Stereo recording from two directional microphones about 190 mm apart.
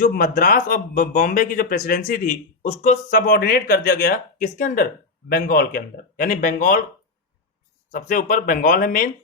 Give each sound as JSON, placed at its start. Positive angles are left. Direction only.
{"t": 0.0, "sound": "speech", "side_deg": 50}
{"t": 7.9, "sound": "speech", "side_deg": 45}